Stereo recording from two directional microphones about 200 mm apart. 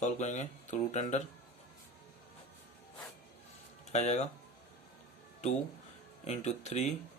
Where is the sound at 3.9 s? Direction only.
35° left (ahead or behind).